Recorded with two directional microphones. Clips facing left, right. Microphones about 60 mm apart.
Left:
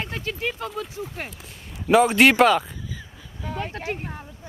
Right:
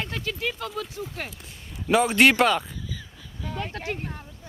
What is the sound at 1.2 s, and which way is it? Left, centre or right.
Speech, centre.